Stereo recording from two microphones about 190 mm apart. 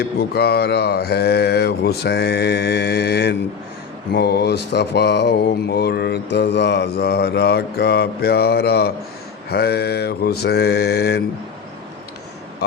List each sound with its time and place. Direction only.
0.0 s speech: 55° left (ahead or behind)